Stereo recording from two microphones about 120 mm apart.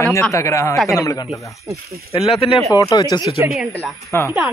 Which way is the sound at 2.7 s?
35° left (ahead or behind).